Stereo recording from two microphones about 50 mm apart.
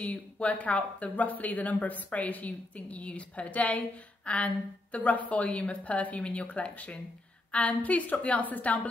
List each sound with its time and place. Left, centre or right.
0.0 s a woman's voice: left